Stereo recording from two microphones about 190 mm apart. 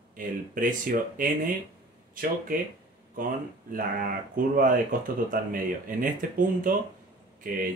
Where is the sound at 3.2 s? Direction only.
45° right (ahead or behind).